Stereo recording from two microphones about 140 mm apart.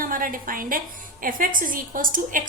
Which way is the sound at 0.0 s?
75° right (ahead or behind).